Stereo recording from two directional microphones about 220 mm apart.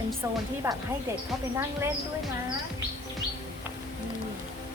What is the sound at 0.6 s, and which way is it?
Speech, 15° right (ahead or behind).